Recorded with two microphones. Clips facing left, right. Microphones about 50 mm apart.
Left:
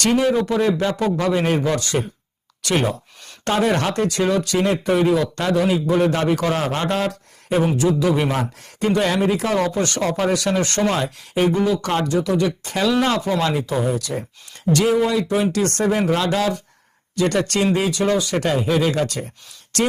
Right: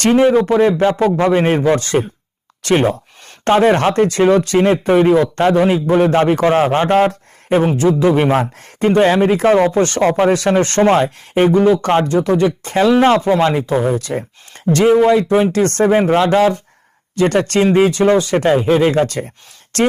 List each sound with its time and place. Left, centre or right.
0.0 s speech: right